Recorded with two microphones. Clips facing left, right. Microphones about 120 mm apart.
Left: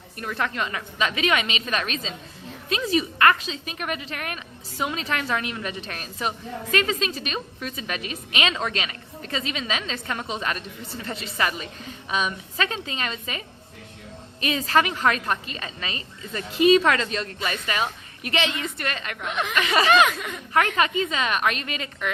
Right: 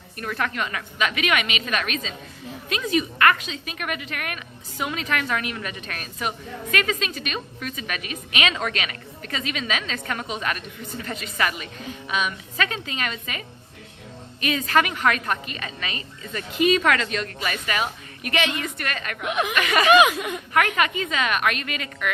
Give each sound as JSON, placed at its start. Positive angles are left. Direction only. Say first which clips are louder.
{"t": 0.2, "sound": "a woman's voice", "louder": "even", "side_deg": 25}
{"t": 14.4, "sound": "a woman's voice", "louder": "even", "side_deg": 30}
{"t": 19.2, "sound": "speech", "louder": "right 4 dB", "side_deg": -10}
{"t": 19.5, "sound": "a woman's voice", "louder": "left 1 dB", "side_deg": 25}
{"t": 19.9, "sound": "speech", "louder": "right 5 dB", "side_deg": -10}
{"t": 20.5, "sound": "a woman's voice", "louder": "left 1 dB", "side_deg": 30}